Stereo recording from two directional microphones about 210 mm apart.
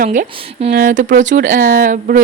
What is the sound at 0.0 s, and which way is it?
Speech, 40° right (ahead or behind).